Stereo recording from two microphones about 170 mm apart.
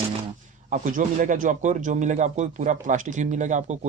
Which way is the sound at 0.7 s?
50° right (ahead or behind).